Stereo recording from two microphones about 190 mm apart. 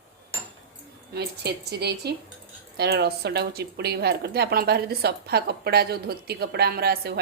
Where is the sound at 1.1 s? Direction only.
60° right (ahead or behind).